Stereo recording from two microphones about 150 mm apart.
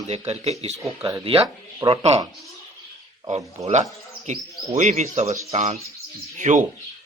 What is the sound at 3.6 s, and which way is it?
Speech, 50° right (ahead or behind).